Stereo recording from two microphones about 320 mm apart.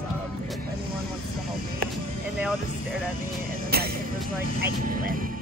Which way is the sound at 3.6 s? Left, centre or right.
Right.